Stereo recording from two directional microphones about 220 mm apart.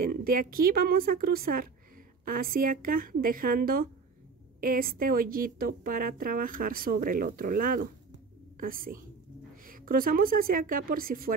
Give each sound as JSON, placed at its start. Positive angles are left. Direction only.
{"t": 0.0, "sound": "speech", "side_deg": -40}